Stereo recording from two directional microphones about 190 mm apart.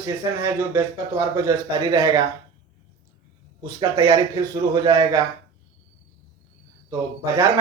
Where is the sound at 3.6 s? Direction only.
20° right (ahead or behind).